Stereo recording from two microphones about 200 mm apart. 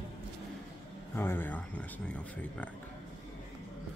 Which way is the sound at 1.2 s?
10° left (ahead or behind).